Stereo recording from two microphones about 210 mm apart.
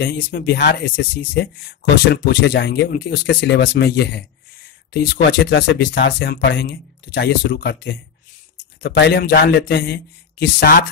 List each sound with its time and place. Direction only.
0.0 s speech: 55° left (ahead or behind)